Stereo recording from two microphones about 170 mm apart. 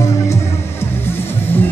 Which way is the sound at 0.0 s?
20° left (ahead or behind).